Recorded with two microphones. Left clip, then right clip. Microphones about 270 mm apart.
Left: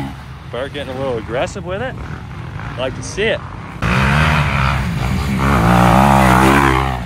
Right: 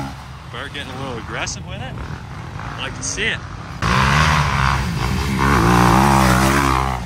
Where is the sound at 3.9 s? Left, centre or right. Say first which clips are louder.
Even; right.